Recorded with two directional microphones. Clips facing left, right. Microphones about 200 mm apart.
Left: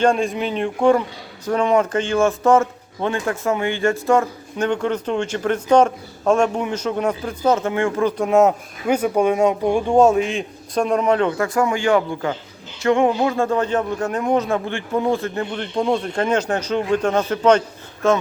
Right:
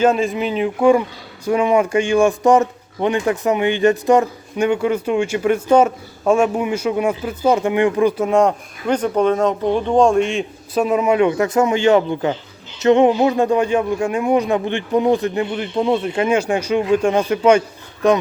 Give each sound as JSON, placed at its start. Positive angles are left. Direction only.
{"t": 0.0, "sound": "speech", "side_deg": 0}
{"t": 8.2, "sound": "speech", "side_deg": 5}
{"t": 15.5, "sound": "speech", "side_deg": -5}